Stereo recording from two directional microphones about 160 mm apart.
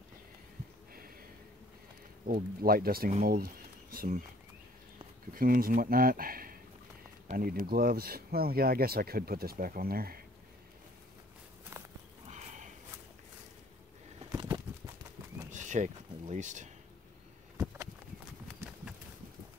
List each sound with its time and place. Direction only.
2.2 s speech: 65° right (ahead or behind)
3.3 s a sound: 70° right (ahead or behind)
5.3 s speech: 65° right (ahead or behind)
11.7 s walk: 15° right (ahead or behind)
12.3 s sniff: 50° right (ahead or behind)
15.5 s a sound: 50° right (ahead or behind)